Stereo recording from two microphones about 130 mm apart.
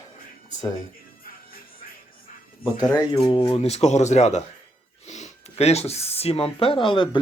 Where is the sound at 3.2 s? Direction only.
40° left (ahead or behind).